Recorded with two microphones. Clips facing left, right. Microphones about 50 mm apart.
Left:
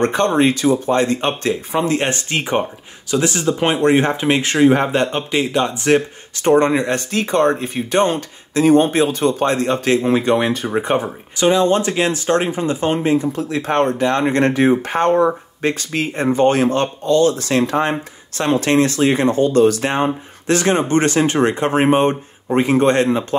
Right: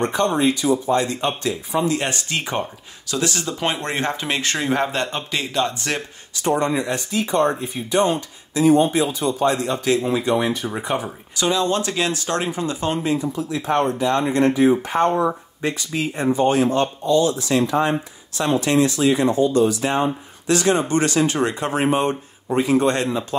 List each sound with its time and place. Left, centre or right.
0.0 s speech: left
2.0 s speech: left
6.3 s speech: left
10.7 s speech: left
13.3 s speech: left